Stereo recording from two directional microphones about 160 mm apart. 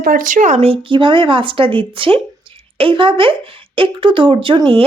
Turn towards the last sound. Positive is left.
turn(degrees=-35)  # may be behind; listen again after turning